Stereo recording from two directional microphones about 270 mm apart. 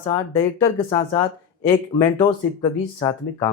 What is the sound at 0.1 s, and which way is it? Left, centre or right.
Speech, centre.